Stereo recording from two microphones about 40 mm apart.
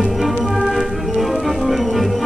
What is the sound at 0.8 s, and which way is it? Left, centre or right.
Music, centre.